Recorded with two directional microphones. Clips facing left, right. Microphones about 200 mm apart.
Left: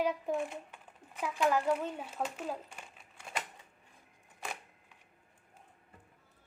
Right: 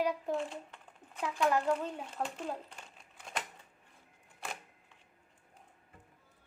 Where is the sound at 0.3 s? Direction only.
15° left (ahead or behind).